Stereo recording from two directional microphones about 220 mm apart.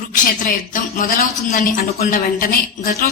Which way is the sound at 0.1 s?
40° left (ahead or behind).